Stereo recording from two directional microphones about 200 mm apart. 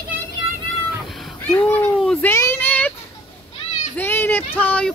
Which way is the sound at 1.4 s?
10° left (ahead or behind).